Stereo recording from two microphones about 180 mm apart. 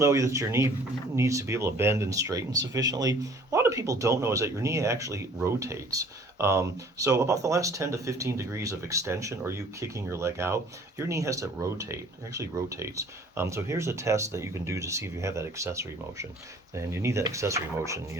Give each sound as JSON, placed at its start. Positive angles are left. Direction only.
{"t": 0.0, "sound": "speech", "side_deg": -15}